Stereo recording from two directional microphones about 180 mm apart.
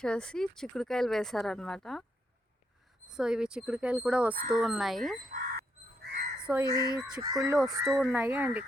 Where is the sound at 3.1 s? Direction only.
5° right (ahead or behind).